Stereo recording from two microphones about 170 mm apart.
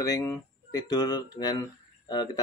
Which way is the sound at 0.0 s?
20° left (ahead or behind).